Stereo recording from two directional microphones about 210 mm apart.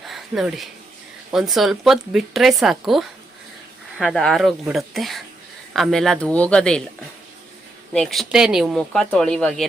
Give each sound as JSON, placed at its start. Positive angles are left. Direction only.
{"t": 0.1, "sound": "a sound", "side_deg": 0}
{"t": 1.3, "sound": "speech", "side_deg": 0}
{"t": 7.9, "sound": "speech", "side_deg": 0}